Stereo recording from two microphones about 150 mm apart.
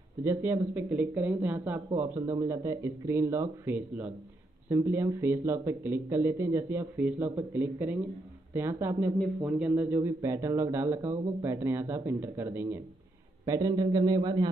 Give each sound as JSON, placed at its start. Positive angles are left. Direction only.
{"t": 0.2, "sound": "speech", "side_deg": -15}
{"t": 9.4, "sound": "a man's voice", "side_deg": -5}